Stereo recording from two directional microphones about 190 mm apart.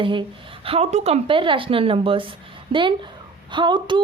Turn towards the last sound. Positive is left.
turn(degrees=-25)  # may be behind; listen again after turning